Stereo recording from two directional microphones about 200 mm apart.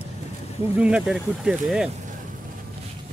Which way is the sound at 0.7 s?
5° right (ahead or behind).